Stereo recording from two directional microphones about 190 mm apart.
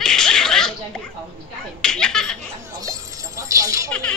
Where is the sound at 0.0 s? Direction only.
5° left (ahead or behind).